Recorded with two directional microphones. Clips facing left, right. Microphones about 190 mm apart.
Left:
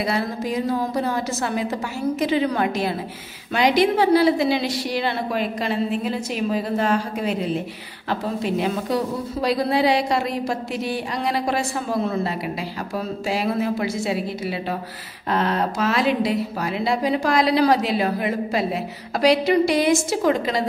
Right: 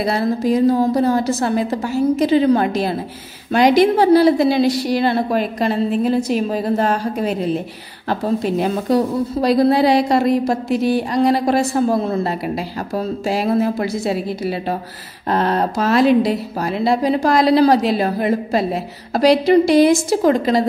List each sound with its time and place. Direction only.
0.0 s a woman's voice: 35° right (ahead or behind)